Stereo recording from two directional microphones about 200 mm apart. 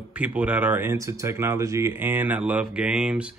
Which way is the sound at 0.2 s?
10° right (ahead or behind).